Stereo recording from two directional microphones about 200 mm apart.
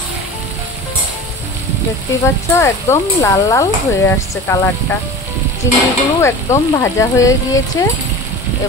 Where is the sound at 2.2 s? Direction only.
15° left (ahead or behind).